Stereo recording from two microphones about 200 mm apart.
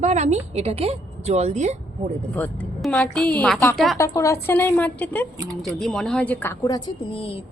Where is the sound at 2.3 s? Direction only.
5° left (ahead or behind).